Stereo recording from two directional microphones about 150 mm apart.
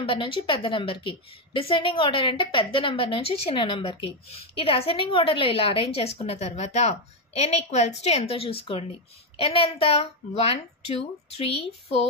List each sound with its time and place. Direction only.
0.0 s a woman's voice: 35° left (ahead or behind)